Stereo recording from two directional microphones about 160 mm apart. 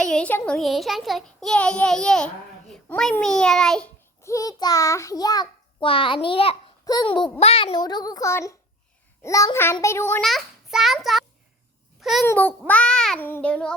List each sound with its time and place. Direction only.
0.0 s a child's voice: 5° left (ahead or behind)
4.2 s a child's voice: 20° left (ahead or behind)
10.2 s a child's voice: centre (ahead or behind)
12.2 s a child's voice: 15° left (ahead or behind)